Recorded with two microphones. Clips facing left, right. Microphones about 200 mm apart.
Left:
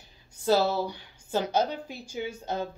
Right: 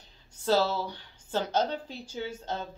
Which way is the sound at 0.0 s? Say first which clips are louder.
Left 3 dB; 10° left (ahead or behind).